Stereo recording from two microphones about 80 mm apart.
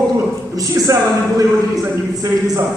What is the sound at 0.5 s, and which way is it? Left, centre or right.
Speech, right.